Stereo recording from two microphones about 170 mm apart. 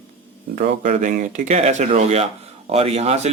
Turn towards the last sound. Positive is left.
turn(degrees=-40)  # may be behind; listen again after turning